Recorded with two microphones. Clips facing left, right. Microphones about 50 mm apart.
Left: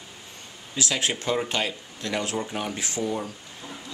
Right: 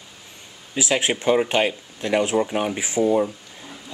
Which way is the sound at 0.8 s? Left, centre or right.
Centre.